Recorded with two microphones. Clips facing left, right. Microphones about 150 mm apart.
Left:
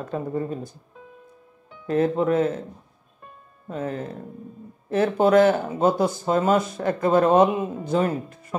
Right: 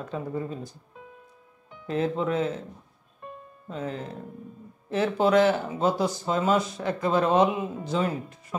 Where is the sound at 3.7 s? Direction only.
50° left (ahead or behind).